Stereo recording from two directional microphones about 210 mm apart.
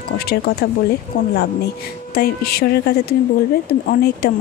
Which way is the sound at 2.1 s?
45° left (ahead or behind).